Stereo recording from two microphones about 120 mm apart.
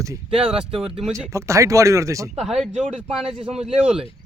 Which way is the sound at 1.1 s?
25° right (ahead or behind).